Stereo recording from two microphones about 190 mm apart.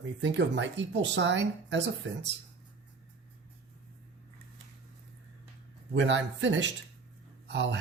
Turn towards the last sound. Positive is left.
turn(degrees=-65)  # may be behind; listen again after turning